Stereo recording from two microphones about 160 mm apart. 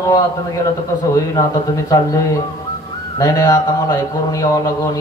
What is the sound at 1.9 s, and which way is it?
Mantra, 20° left (ahead or behind).